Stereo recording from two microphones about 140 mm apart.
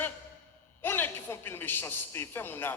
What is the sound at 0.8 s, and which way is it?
A man's voice, 15° left (ahead or behind).